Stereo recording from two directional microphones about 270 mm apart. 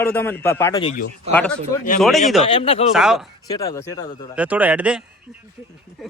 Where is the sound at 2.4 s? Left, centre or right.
Left.